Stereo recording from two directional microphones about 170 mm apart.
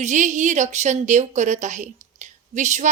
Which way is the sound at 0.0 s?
45° right (ahead or behind).